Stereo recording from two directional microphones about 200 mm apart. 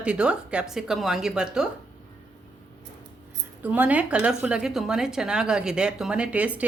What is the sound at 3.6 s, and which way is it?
A woman's voice, 10° right (ahead or behind).